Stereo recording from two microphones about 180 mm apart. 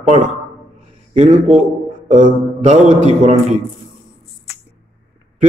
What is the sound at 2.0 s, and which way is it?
A man's voice, 45° right (ahead or behind).